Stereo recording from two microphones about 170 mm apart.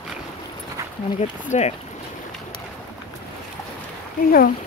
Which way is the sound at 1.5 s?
40° left (ahead or behind).